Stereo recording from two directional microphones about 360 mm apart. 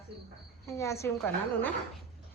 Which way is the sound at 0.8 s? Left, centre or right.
Centre.